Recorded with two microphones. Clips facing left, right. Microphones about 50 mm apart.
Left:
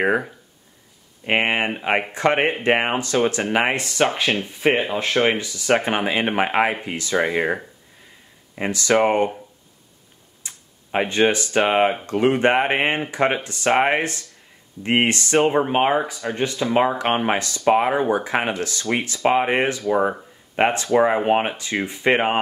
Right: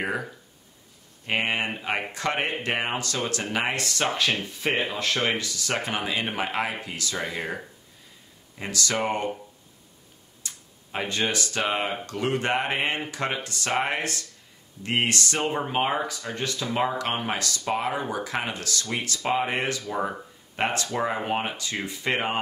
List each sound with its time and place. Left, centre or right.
0.0 s speech: left
10.4 s speech: left